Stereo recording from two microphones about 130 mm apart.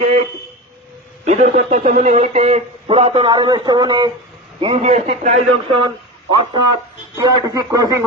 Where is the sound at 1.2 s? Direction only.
60° right (ahead or behind); by 4.1 s 35° right (ahead or behind).